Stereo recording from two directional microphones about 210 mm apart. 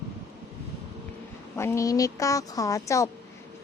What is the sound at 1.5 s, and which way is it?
A woman's voice, 10° left (ahead or behind).